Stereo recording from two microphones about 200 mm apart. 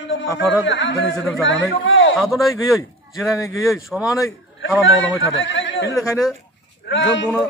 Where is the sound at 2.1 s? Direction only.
Centre (ahead or behind).